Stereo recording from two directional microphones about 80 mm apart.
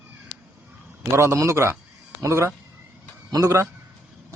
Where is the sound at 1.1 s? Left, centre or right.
Right.